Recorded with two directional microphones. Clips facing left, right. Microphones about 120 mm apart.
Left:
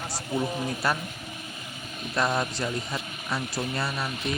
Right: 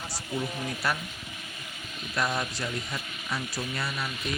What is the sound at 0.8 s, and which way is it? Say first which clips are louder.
Speech: left 3 dB; 30° left (ahead or behind).